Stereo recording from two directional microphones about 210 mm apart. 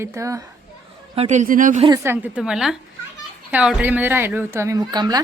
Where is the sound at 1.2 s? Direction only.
35° right (ahead or behind).